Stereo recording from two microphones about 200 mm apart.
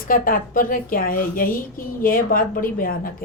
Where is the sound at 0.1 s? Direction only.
45° left (ahead or behind).